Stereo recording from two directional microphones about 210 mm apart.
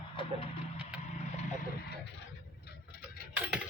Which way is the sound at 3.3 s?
5° right (ahead or behind).